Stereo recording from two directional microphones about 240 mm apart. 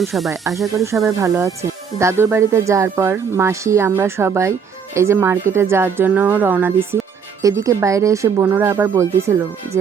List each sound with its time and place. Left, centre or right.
0.0 s speech: centre
1.2 s speech: centre